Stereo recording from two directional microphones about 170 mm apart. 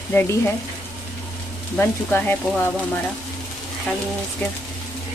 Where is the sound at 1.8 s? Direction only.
10° left (ahead or behind).